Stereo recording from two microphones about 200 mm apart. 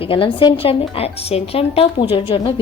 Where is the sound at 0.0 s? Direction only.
25° left (ahead or behind).